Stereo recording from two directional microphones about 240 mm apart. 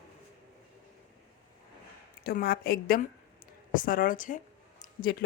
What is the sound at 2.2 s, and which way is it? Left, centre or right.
A woman's voice, left.